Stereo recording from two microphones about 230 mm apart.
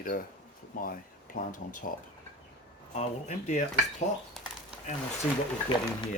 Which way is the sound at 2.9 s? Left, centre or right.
Left.